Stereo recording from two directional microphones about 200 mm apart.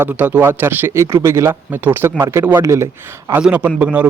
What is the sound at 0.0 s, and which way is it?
Speech, 10° right (ahead or behind).